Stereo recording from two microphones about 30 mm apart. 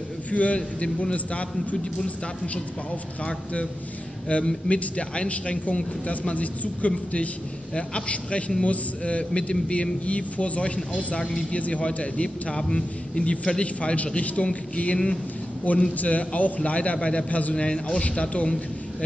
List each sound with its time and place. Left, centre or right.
0.3 s a man's voice: left
4.3 s a man's voice: left
7.7 s a man's voice: left
11.8 s a man's voice: left
17.3 s a man's voice: left
17.6 s a man's voice: left